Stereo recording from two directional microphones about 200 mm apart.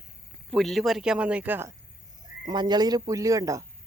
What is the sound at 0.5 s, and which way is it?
Speech, centre (ahead or behind).